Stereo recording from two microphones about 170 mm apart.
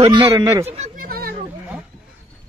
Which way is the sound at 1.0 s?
60° right (ahead or behind).